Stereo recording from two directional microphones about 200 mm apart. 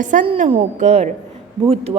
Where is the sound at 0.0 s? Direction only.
40° right (ahead or behind).